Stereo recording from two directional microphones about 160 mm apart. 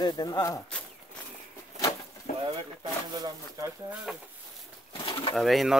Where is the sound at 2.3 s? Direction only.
50° left (ahead or behind).